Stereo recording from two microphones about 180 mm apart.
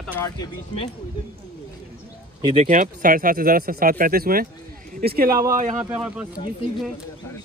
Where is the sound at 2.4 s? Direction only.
35° right (ahead or behind); by 5.4 s 55° right (ahead or behind).